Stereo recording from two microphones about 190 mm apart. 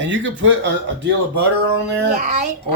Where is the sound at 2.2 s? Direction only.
35° right (ahead or behind).